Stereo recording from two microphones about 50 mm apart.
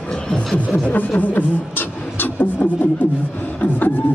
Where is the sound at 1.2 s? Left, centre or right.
Left.